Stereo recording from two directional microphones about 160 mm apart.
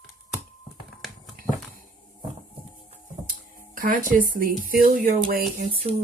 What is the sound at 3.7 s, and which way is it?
Speech, 60° right (ahead or behind).